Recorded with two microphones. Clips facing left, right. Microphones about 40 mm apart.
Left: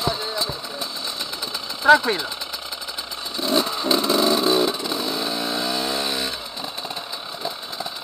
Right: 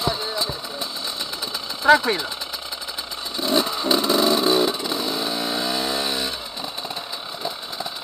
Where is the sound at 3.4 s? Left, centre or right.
Right.